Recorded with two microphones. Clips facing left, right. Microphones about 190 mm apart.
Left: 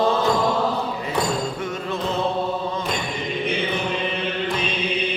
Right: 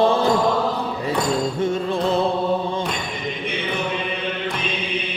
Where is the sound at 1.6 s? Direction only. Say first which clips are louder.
Right 6 dB; 30° right (ahead or behind).